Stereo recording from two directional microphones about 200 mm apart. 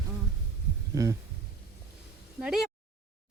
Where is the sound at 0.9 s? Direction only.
15° right (ahead or behind).